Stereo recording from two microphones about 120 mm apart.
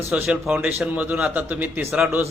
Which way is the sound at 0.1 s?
5° right (ahead or behind).